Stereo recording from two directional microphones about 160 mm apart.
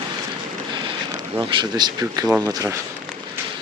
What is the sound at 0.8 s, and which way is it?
Speech, 25° right (ahead or behind).